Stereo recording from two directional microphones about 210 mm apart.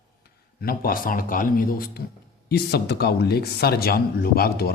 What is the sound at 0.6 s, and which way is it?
Speech, 45° left (ahead or behind).